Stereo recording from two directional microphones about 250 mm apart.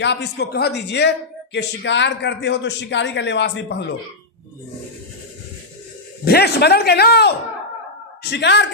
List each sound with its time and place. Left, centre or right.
0.0 s a man's voice: left
6.2 s a man's voice: left